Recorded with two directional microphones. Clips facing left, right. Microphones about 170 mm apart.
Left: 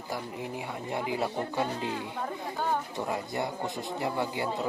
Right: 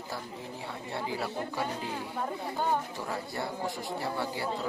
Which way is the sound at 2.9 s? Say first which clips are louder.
Left 4 dB; 20° left (ahead or behind).